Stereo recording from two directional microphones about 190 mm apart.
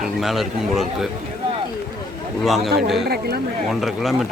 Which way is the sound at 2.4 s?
Centre (ahead or behind).